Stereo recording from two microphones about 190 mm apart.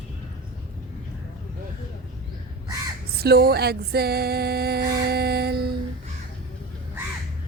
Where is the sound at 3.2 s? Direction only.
55° right (ahead or behind).